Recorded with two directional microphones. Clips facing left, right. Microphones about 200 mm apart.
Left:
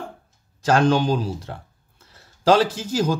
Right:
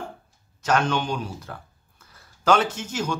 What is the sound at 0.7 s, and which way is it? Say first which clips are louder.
Speech: left 5 dB; 35° left (ahead or behind).